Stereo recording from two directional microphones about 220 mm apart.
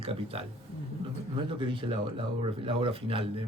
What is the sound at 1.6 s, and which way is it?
Speech, 25° right (ahead or behind).